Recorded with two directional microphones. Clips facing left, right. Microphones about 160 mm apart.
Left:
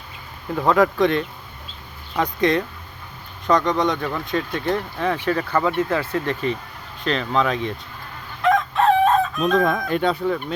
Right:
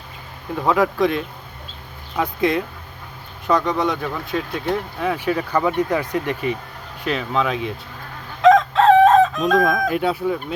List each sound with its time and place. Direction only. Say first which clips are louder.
0.5 s speech: left 1 dB; centre (ahead or behind)
8.4 s chicken: right 6 dB; 90° right
9.4 s speech: right 2 dB; 5° right (ahead or behind)